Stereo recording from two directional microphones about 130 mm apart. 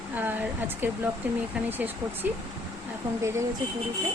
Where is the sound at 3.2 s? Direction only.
20° right (ahead or behind).